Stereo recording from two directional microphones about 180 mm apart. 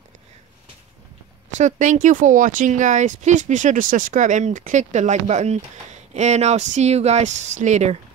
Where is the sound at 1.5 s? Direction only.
40° right (ahead or behind).